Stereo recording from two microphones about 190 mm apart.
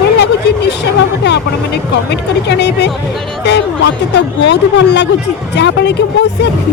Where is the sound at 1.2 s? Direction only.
60° left (ahead or behind).